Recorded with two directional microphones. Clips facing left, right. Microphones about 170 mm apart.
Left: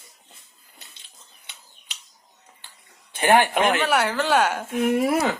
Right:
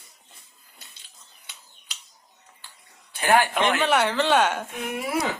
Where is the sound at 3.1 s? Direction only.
20° left (ahead or behind).